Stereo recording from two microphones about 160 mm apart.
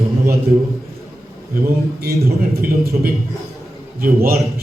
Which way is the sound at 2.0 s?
75° right (ahead or behind).